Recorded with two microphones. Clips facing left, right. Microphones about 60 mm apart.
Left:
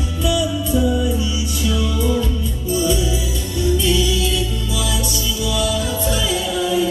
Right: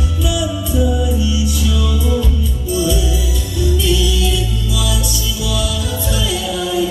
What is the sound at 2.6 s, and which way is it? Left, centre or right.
Music, left.